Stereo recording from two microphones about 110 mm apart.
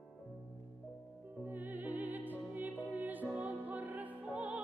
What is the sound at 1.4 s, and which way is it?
Music, 15° right (ahead or behind).